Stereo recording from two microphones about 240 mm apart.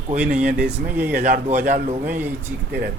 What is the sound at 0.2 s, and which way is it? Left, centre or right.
Speech, centre.